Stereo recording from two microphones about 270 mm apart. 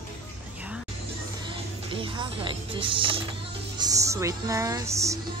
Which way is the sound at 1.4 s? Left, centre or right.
Centre.